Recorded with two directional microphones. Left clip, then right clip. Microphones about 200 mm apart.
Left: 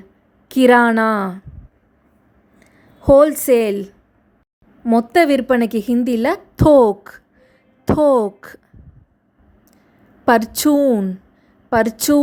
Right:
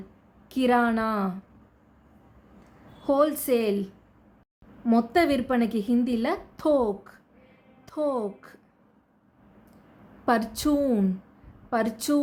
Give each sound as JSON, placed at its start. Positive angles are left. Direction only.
{"t": 0.4, "sound": "speech", "side_deg": 45}
{"t": 3.0, "sound": "a woman's voice", "side_deg": 40}
{"t": 10.2, "sound": "a woman's voice", "side_deg": 40}